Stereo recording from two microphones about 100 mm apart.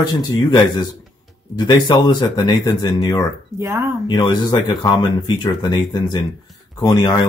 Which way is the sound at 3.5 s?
25° right (ahead or behind).